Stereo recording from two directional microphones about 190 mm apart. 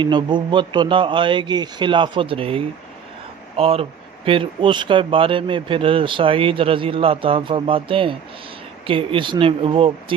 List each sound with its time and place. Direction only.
0.0 s speech: 25° right (ahead or behind)